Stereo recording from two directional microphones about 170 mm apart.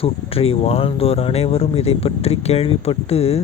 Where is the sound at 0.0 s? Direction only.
35° left (ahead or behind).